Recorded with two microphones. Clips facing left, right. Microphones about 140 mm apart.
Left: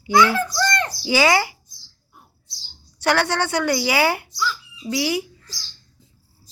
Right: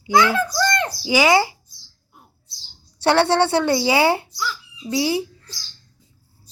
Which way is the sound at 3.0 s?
25° right (ahead or behind).